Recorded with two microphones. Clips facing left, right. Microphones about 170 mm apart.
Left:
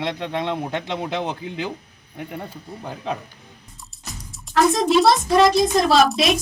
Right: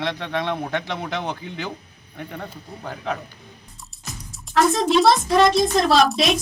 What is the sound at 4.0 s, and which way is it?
Speech, centre (ahead or behind).